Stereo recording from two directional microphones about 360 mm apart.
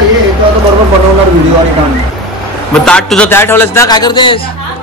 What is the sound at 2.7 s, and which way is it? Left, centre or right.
A man's voice, centre.